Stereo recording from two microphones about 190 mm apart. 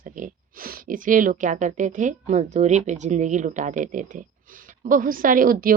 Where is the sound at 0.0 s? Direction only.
45° right (ahead or behind).